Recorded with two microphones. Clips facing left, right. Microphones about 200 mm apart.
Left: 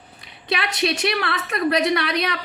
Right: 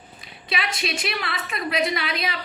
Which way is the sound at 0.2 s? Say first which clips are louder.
Left 4 dB; 65° left (ahead or behind).